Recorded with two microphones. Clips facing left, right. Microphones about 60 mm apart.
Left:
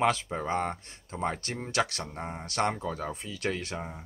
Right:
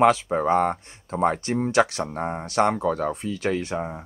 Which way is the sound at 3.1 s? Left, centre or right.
Centre.